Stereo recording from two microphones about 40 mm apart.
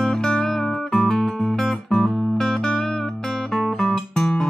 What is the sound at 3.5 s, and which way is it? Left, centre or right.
Guitar, centre.